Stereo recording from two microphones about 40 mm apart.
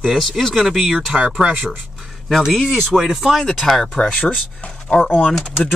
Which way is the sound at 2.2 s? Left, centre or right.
Centre.